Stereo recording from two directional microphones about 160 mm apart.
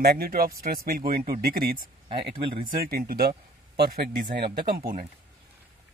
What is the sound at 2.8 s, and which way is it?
Speech, 70° right (ahead or behind).